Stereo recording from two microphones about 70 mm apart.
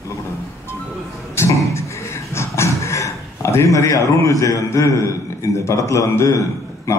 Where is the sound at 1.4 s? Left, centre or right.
Left.